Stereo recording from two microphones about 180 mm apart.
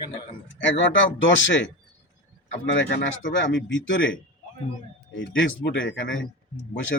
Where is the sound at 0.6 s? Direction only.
90° left.